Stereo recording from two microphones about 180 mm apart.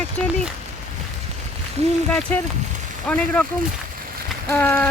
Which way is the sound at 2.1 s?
5° left (ahead or behind).